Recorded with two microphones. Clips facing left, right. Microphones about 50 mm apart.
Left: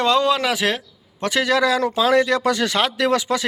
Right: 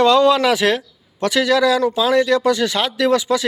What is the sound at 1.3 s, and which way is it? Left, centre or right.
A man's voice, left.